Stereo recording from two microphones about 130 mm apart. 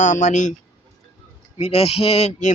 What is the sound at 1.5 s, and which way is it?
Speech, 50° left (ahead or behind).